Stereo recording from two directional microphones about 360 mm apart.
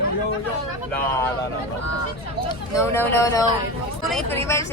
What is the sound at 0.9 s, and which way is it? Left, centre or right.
Speech, centre.